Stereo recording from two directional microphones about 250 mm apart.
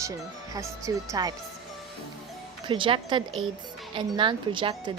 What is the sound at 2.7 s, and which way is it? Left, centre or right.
Speech, centre.